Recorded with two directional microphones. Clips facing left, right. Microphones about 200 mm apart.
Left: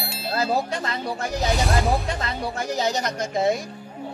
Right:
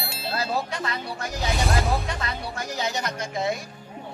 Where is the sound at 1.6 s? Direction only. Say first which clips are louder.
Left 2 dB; centre (ahead or behind).